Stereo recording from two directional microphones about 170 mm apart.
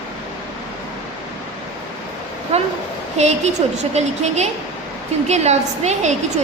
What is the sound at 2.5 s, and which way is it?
A woman's voice, 40° right (ahead or behind).